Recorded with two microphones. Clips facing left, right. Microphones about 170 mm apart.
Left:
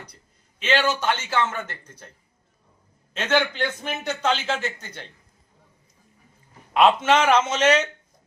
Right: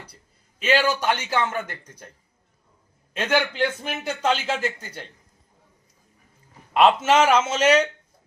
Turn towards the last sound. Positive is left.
turn(degrees=-10)  # may be behind; listen again after turning